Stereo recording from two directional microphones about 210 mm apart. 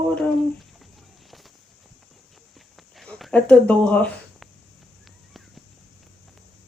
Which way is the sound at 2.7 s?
Centre (ahead or behind).